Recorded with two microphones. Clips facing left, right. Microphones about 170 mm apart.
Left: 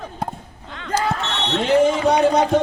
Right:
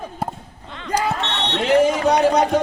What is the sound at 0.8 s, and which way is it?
Basketball bounce, 10° right (ahead or behind).